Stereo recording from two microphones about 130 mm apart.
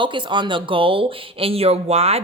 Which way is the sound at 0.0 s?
40° right (ahead or behind).